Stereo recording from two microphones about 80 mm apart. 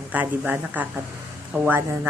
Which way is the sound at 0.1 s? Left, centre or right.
Right.